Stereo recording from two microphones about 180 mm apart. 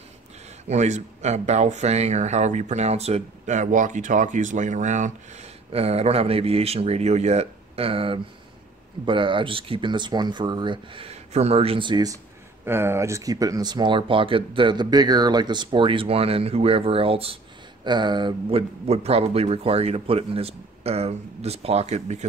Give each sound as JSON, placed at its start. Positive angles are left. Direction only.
{"t": 0.7, "sound": "speech", "side_deg": -40}